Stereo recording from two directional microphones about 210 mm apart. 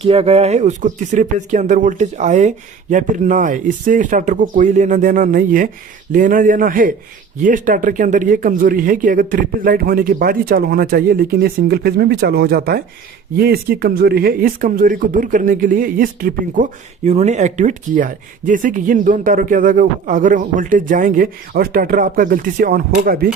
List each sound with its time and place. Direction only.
0.0 s speech: 30° right (ahead or behind)
17.1 s speech: 30° right (ahead or behind)